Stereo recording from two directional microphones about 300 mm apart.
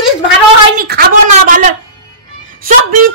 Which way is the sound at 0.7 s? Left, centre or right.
Right.